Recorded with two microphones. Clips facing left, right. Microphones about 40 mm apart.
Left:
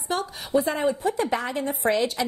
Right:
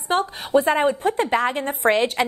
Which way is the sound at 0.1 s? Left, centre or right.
Right.